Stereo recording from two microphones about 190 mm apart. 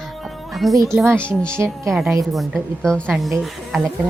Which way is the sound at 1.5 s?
15° right (ahead or behind).